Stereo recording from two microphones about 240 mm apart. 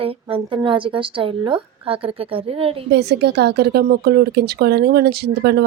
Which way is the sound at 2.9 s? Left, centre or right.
Right.